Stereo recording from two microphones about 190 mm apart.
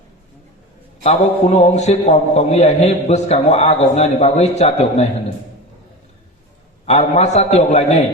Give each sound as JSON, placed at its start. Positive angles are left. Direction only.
{"t": 1.0, "sound": "a man's voice", "side_deg": 35}
{"t": 6.8, "sound": "a man's voice", "side_deg": 35}